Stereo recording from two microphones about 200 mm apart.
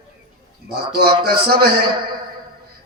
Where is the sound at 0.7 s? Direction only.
50° right (ahead or behind).